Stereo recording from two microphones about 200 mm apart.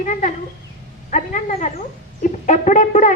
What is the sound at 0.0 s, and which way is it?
A woman's voice, 40° left (ahead or behind).